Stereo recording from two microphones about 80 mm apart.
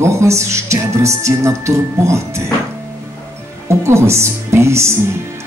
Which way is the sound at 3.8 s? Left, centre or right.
Right.